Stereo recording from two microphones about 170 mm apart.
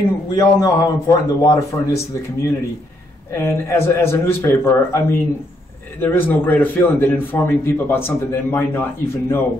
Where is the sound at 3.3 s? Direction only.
15° left (ahead or behind).